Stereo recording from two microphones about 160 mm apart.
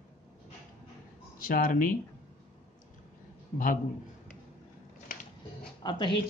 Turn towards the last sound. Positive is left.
turn(degrees=30)  # may be behind; listen again after turning